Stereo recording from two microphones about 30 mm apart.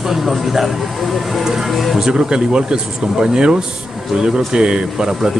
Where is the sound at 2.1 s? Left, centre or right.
Right.